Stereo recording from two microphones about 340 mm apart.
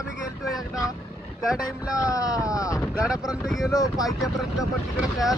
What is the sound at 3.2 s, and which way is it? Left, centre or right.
Speech, centre.